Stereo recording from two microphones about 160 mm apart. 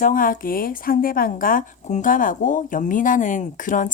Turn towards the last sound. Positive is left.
turn(degrees=55)  # may be behind; listen again after turning